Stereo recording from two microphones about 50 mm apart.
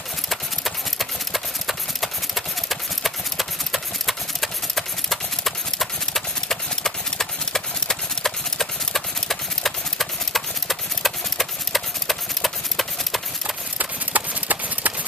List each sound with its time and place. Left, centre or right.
0.3 s clip-clop: centre
13.7 s clip-clop: right